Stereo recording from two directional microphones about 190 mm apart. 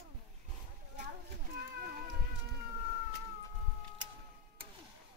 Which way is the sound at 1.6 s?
50° right (ahead or behind).